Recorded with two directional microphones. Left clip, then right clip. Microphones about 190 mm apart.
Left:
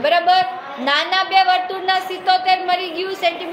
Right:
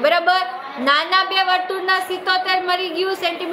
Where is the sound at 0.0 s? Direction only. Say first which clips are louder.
Left 1 dB; 55° right (ahead or behind).